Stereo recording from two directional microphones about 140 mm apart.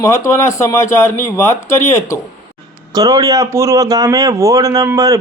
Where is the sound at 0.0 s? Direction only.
20° left (ahead or behind).